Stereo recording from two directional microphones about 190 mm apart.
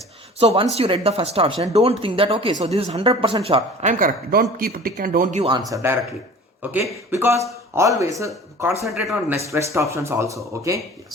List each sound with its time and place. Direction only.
0.3 s speech: 35° right (ahead or behind)
5.4 s speech: 25° right (ahead or behind)
5.7 s a man's voice: 15° right (ahead or behind)
8.8 s speech: centre (ahead or behind)
9.5 s speech: 15° right (ahead or behind)